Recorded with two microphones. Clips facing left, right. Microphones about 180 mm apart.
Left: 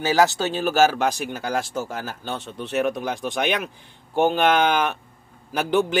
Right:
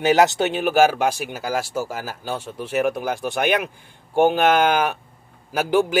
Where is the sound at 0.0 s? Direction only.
20° right (ahead or behind).